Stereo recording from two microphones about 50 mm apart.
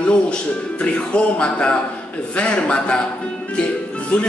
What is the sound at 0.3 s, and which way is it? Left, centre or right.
Speech, left.